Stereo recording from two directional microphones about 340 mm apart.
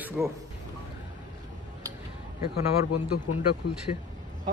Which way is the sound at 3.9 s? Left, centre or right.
Left.